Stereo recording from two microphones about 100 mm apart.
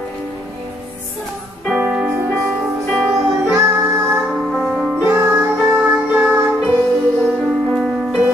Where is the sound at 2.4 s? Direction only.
Centre (ahead or behind).